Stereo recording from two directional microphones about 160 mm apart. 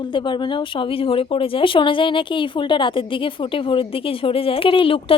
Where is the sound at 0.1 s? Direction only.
30° left (ahead or behind).